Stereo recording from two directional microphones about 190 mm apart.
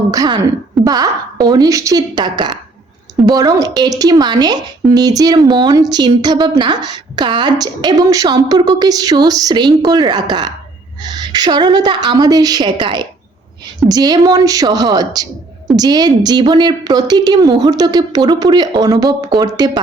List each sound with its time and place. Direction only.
0.1 s speech: 20° right (ahead or behind)